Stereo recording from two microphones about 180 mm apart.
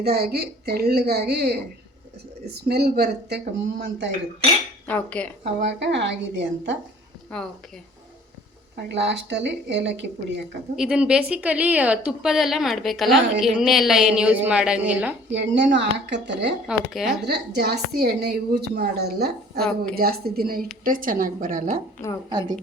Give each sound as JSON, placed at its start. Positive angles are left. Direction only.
{"t": 0.0, "sound": "a woman's voice", "side_deg": -60}
{"t": 4.9, "sound": "speech", "side_deg": 10}
{"t": 5.6, "sound": "a woman's voice", "side_deg": -80}
{"t": 7.3, "sound": "a woman's voice", "side_deg": 5}
{"t": 8.7, "sound": "speech", "side_deg": -75}
{"t": 10.8, "sound": "a woman's voice", "side_deg": -5}
{"t": 15.3, "sound": "speech", "side_deg": -75}
{"t": 16.6, "sound": "a woman's voice", "side_deg": 0}
{"t": 17.2, "sound": "a woman's voice", "side_deg": -65}
{"t": 19.5, "sound": "a woman's voice", "side_deg": 0}
{"t": 20.0, "sound": "a woman's voice", "side_deg": -55}
{"t": 22.3, "sound": "a woman's voice", "side_deg": -25}